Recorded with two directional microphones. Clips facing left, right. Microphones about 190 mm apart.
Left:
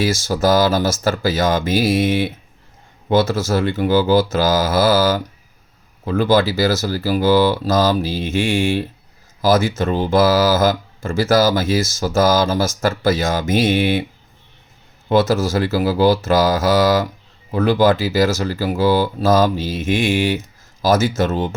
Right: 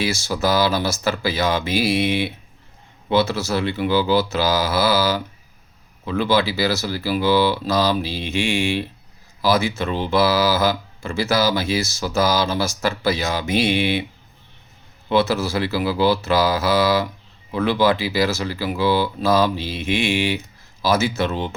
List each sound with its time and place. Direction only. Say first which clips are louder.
0.0 s speech: left 4 dB; 45° left (ahead or behind)
15.1 s speech: left 3 dB; 45° left (ahead or behind)